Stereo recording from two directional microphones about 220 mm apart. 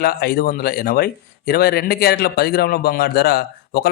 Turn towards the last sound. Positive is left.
turn(degrees=45)  # may be behind; listen again after turning